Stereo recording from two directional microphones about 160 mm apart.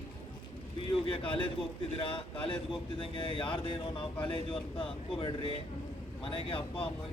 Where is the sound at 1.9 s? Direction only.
35° left (ahead or behind).